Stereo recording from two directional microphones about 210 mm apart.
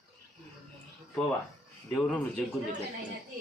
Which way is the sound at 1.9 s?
Centre (ahead or behind).